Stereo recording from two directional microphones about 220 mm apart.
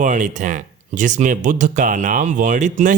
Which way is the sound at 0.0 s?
35° right (ahead or behind).